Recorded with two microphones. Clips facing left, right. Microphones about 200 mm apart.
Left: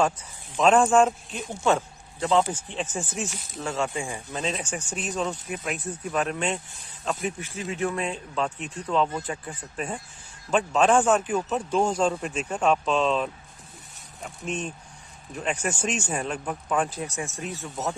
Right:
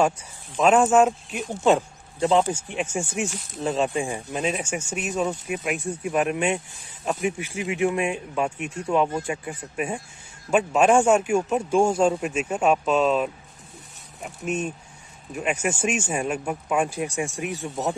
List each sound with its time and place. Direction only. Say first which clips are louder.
0.6 s speech: right 1 dB; 5° right (ahead or behind)